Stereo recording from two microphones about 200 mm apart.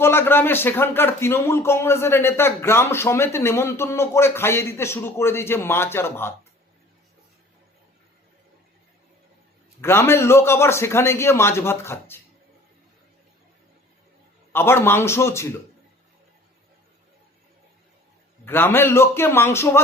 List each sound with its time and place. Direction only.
0.0 s speech: 10° left (ahead or behind)
9.8 s speech: 10° left (ahead or behind)
14.5 s speech: 10° left (ahead or behind)
18.4 s speech: 10° left (ahead or behind)